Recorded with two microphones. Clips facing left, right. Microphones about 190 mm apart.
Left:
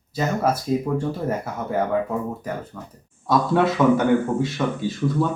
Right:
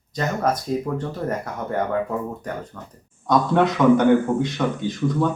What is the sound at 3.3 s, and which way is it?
A man's voice, 5° left (ahead or behind).